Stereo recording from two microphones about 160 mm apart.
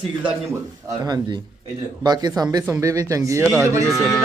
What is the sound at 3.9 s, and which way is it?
Speech, centre (ahead or behind).